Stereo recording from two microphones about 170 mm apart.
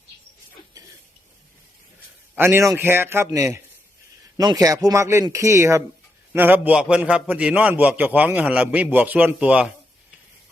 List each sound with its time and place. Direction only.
2.3 s a man's voice: 15° right (ahead or behind)